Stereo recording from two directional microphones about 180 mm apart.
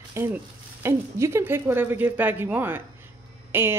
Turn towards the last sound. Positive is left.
turn(degrees=-10)  # may be behind; listen again after turning